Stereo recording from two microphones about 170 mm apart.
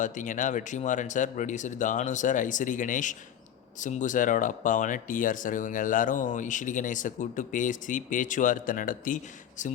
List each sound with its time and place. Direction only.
0.0 s speech: 50° left (ahead or behind)